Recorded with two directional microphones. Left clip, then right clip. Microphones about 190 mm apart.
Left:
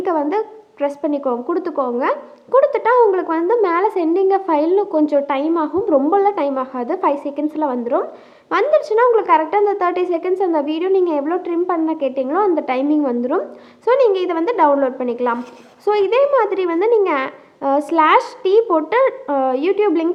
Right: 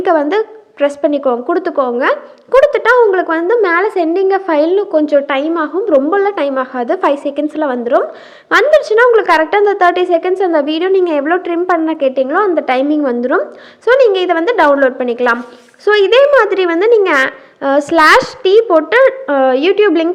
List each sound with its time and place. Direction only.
0.0 s a woman's voice: 20° right (ahead or behind)